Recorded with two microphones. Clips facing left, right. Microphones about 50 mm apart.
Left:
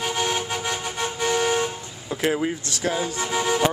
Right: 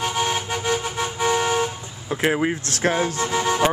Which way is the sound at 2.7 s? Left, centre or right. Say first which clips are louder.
Right 4 dB; right.